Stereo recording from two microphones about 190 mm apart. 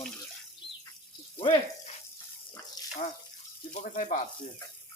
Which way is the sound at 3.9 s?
45° left (ahead or behind).